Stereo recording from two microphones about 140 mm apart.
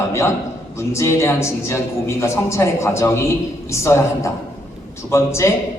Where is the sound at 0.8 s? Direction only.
20° left (ahead or behind).